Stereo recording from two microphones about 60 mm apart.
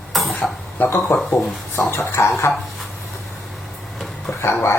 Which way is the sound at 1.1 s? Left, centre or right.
Left.